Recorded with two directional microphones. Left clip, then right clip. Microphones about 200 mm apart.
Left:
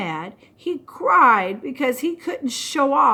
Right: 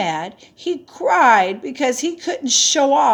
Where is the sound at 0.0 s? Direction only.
15° left (ahead or behind).